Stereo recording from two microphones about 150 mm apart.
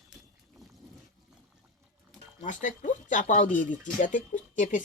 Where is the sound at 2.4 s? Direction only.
55° left (ahead or behind).